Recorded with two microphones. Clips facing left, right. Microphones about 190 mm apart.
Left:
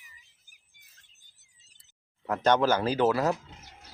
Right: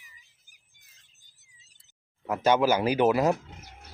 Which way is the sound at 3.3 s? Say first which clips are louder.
Right 3 dB; 55° right (ahead or behind).